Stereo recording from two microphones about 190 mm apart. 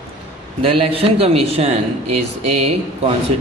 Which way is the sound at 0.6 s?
30° right (ahead or behind).